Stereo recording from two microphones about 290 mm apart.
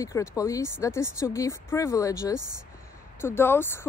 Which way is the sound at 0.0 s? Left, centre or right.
Centre.